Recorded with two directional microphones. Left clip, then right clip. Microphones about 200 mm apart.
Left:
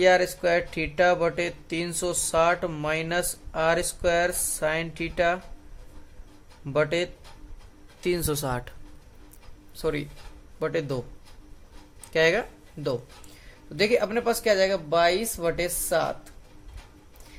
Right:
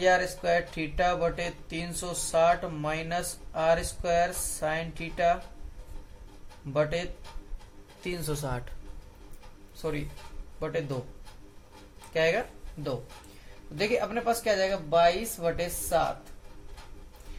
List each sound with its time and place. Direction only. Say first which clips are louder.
0.0 s speech: left 4 dB; 50° left (ahead or behind)
6.7 s speech: left 4 dB; 50° left (ahead or behind)
10.6 s speech: left 4 dB; 50° left (ahead or behind)
12.1 s speech: left 4 dB; 50° left (ahead or behind)